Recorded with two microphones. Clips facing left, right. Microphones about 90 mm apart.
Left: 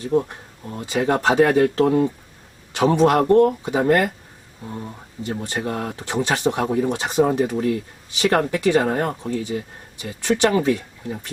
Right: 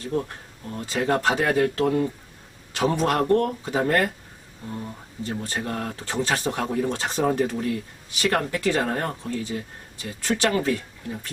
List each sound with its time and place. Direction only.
0.0 s speech: 15° left (ahead or behind)